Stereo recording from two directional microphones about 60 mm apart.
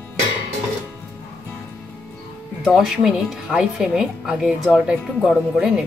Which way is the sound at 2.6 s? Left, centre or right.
Centre.